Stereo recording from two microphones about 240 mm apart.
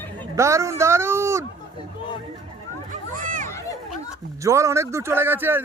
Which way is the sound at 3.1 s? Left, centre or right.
Right.